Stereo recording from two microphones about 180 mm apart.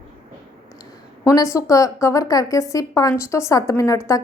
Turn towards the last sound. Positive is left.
turn(degrees=15)  # may be behind; listen again after turning